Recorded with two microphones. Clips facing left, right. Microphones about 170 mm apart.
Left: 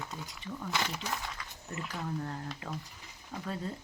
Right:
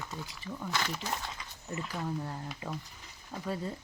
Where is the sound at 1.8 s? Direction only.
Centre (ahead or behind).